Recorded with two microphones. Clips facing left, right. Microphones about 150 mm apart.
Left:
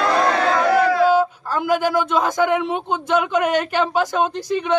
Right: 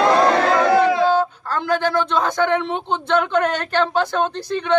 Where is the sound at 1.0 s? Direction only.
10° left (ahead or behind).